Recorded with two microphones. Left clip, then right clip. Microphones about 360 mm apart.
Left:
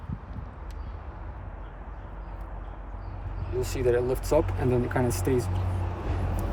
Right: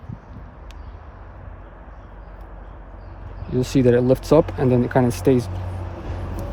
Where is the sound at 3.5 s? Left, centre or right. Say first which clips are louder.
Right 8 dB; right.